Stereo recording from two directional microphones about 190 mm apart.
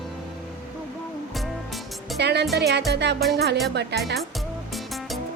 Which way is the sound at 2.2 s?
60° right (ahead or behind).